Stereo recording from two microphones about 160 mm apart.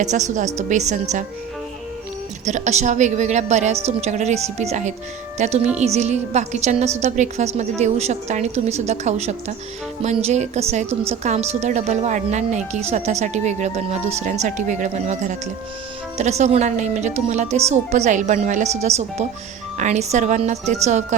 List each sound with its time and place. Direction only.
0.0 s a woman's voice: 50° right (ahead or behind)
2.4 s a woman's voice: 45° right (ahead or behind)